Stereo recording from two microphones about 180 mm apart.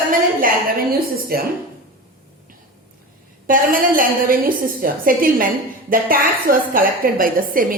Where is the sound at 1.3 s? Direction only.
55° right (ahead or behind).